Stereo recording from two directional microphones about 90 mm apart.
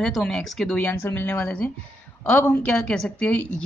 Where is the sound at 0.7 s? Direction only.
20° left (ahead or behind).